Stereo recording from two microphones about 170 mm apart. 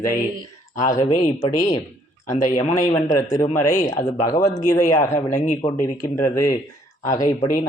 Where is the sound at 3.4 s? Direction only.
50° left (ahead or behind).